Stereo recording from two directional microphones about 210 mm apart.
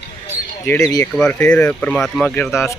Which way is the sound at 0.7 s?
10° left (ahead or behind).